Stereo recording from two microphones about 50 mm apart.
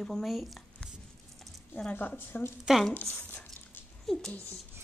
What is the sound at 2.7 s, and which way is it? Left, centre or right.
Speech, centre.